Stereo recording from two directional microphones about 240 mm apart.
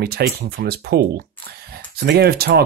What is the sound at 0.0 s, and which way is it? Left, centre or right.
Speech, right.